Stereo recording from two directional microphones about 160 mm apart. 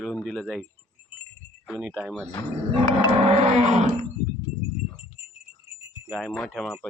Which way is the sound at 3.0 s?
45° right (ahead or behind).